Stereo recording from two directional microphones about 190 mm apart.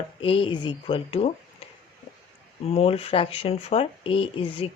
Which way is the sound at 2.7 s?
30° left (ahead or behind).